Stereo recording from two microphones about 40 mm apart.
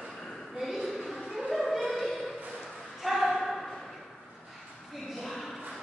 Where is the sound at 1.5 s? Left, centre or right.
Centre.